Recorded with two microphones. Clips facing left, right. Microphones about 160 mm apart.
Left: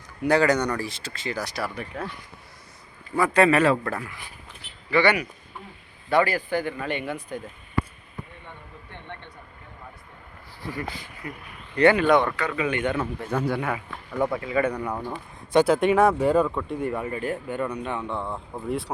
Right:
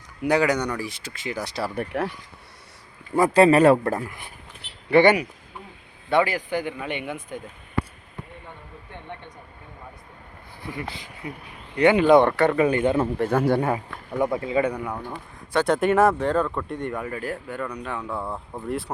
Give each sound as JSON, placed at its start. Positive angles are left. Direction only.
{"t": 0.2, "sound": "speech", "side_deg": -10}
{"t": 1.5, "sound": "speech", "side_deg": -25}
{"t": 1.7, "sound": "speech", "side_deg": -55}
{"t": 3.2, "sound": "speech", "side_deg": -35}
{"t": 4.9, "sound": "speech", "side_deg": -55}
{"t": 6.2, "sound": "speech", "side_deg": -15}
{"t": 11.8, "sound": "speech", "side_deg": -20}
{"t": 12.2, "sound": "speech", "side_deg": -50}
{"t": 12.6, "sound": "speech", "side_deg": -35}
{"t": 13.1, "sound": "speech", "side_deg": -65}
{"t": 13.5, "sound": "speech", "side_deg": -35}
{"t": 14.2, "sound": "speech", "side_deg": -25}
{"t": 14.6, "sound": "speech", "side_deg": -10}